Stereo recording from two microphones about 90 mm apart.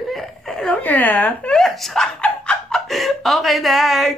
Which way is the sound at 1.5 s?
5° left (ahead or behind).